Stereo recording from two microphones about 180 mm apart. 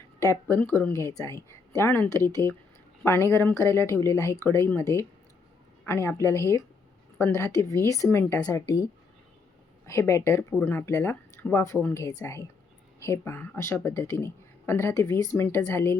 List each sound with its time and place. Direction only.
0.4 s a woman's voice: 10° left (ahead or behind)